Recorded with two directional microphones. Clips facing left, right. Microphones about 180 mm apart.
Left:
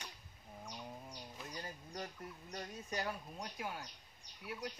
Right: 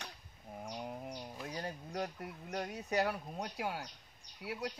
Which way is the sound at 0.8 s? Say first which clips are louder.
Right 7 dB; 60° right (ahead or behind).